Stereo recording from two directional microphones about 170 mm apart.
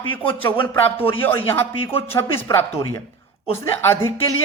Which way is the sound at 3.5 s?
15° left (ahead or behind).